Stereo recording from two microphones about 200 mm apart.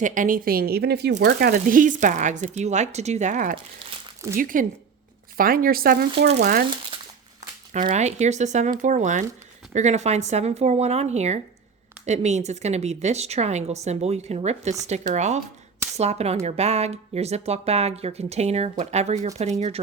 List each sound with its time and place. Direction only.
0.0 s a woman's voice: 40° right (ahead or behind)
6.9 s crumpling: 25° right (ahead or behind)
7.7 s speech: 40° right (ahead or behind)